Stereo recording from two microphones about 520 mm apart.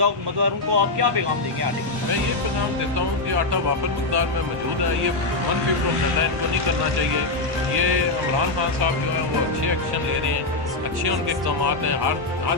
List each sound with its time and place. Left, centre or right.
0.0 s speech: right
11.6 s speech: right